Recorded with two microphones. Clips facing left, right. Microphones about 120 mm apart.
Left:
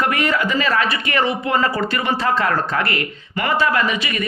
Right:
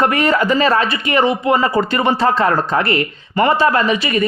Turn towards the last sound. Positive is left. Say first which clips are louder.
# right 5 dB
turn(degrees=-35)  # may be behind; listen again after turning